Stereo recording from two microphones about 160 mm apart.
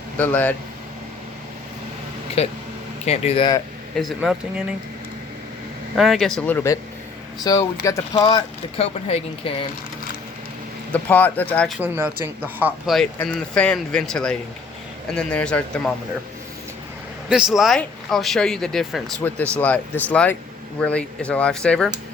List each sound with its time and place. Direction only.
0.2 s speech: 10° left (ahead or behind)
2.4 s speech: 40° left (ahead or behind)
3.9 s speech: centre (ahead or behind)
6.0 s speech: centre (ahead or behind); by 8.4 s 25° left (ahead or behind)
8.8 s speech: 40° left (ahead or behind)
10.9 s speech: 10° left (ahead or behind)
11.8 s speech: 10° right (ahead or behind)
12.9 s speech: centre (ahead or behind)
17.2 s speech: 5° right (ahead or behind)